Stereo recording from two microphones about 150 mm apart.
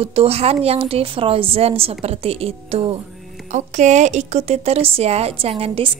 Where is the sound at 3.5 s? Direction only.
50° right (ahead or behind).